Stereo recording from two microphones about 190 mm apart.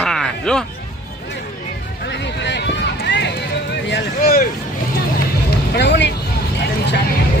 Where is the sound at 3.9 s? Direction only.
55° left (ahead or behind).